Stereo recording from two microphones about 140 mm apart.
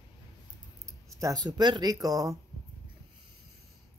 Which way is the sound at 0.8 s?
25° right (ahead or behind).